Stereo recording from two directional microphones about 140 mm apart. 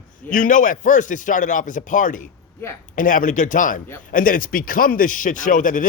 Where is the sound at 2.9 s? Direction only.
70° left (ahead or behind).